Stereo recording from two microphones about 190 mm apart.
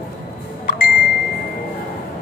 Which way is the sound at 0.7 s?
45° left (ahead or behind).